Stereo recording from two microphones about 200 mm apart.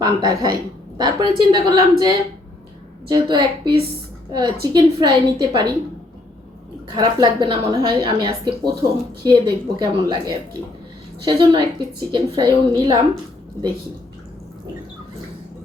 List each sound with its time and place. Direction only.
0.0 s a woman's voice: 20° right (ahead or behind)
6.8 s a woman's voice: 20° right (ahead or behind)